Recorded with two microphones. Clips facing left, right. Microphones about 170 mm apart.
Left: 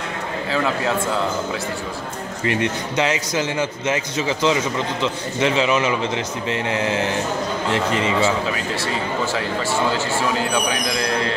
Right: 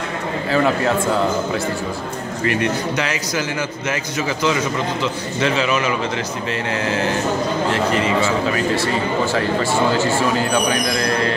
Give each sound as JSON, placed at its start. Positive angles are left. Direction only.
{"t": 2.4, "sound": "a man's voice", "side_deg": 20}
{"t": 10.5, "sound": "speech", "side_deg": 5}